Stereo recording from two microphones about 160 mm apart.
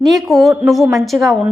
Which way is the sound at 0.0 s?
Centre (ahead or behind).